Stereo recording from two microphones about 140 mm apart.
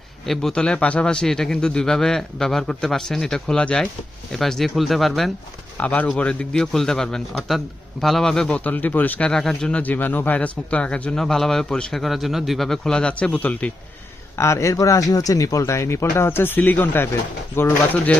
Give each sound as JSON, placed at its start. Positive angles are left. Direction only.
{"t": 0.3, "sound": "a man's voice", "side_deg": 5}